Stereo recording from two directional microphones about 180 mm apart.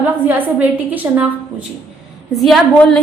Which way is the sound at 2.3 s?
Centre (ahead or behind).